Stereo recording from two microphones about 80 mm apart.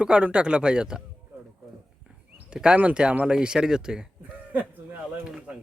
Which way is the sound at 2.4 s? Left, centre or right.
Centre.